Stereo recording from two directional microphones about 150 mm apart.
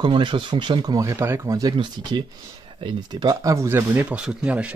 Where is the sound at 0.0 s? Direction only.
30° right (ahead or behind); by 4.7 s 10° right (ahead or behind).